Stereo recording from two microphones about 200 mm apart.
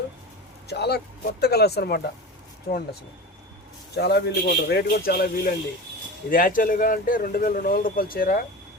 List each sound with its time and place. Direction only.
0.7 s speech: 55° left (ahead or behind)
3.9 s speech: 55° left (ahead or behind)